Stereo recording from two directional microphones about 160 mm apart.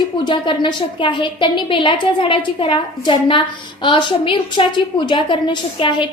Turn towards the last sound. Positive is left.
turn(degrees=30)  # may be behind; listen again after turning